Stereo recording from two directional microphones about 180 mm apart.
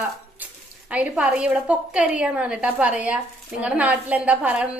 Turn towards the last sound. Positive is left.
turn(degrees=-5)  # may be behind; listen again after turning